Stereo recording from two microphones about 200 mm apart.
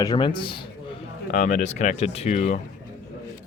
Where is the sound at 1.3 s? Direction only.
40° left (ahead or behind).